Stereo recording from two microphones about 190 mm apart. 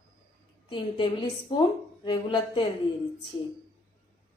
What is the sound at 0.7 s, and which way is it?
A woman's voice, 25° left (ahead or behind).